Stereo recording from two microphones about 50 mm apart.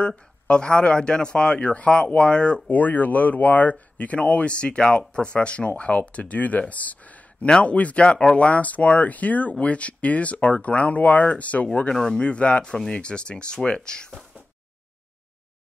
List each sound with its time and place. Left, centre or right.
0.0 s speech: centre
2.7 s speech: left
11.9 s speech: centre
12.2 s speech: left